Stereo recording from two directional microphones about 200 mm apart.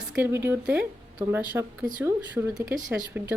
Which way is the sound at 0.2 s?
10° right (ahead or behind).